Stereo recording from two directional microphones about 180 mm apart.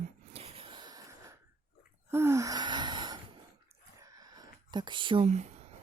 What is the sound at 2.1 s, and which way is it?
Gasp, 15° right (ahead or behind).